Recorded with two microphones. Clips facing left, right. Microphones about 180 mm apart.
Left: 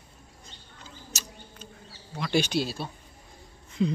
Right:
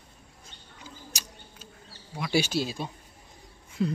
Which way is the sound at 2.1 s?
10° right (ahead or behind).